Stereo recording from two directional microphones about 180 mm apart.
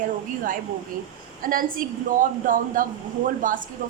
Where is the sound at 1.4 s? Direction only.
50° right (ahead or behind).